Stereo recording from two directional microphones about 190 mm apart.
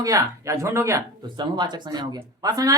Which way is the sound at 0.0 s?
15° right (ahead or behind).